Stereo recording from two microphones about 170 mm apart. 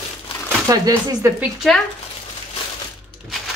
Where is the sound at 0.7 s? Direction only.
20° right (ahead or behind).